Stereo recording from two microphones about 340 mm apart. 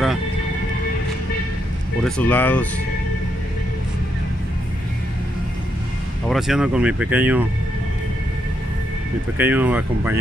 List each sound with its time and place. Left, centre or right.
2.0 s speech: centre
6.2 s speech: centre
9.4 s speech: centre